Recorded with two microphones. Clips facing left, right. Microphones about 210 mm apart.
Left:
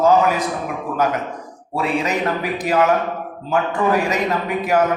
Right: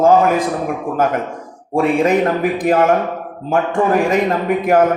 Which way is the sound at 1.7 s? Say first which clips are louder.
Right 7 dB; 50° right (ahead or behind).